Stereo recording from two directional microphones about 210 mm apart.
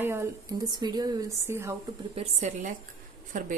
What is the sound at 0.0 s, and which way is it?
Speech, 10° right (ahead or behind).